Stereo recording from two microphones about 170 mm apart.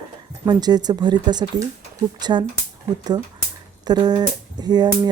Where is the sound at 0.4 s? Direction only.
25° right (ahead or behind).